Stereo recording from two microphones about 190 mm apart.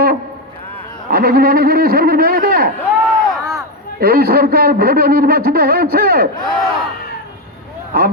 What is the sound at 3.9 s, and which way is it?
A man's voice, 50° right (ahead or behind).